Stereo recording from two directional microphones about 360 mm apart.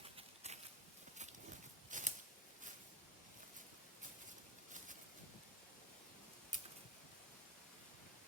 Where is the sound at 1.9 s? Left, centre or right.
Right.